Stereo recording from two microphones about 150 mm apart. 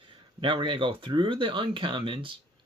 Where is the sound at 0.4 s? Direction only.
35° right (ahead or behind).